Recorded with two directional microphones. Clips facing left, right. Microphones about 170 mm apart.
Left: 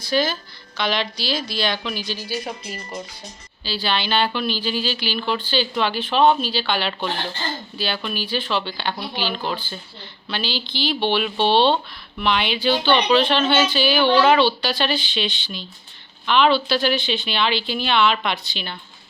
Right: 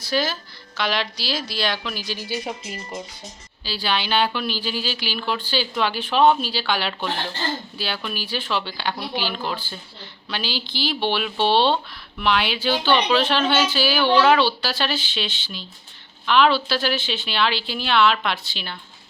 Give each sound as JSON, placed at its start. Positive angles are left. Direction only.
{"t": 0.0, "sound": "a woman's voice", "side_deg": -5}
{"t": 2.1, "sound": "speech", "side_deg": -20}
{"t": 3.6, "sound": "a woman's voice", "side_deg": -10}